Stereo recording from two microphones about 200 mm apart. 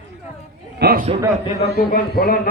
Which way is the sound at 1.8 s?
45° left (ahead or behind).